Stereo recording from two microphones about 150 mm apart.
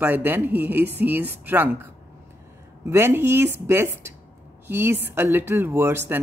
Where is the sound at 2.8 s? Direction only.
15° right (ahead or behind).